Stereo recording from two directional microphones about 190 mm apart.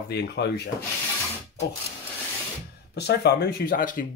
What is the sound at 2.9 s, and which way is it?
Speech, 60° left (ahead or behind).